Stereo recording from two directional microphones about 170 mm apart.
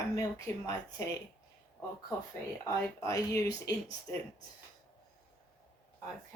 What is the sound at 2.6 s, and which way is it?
Speech, 20° left (ahead or behind).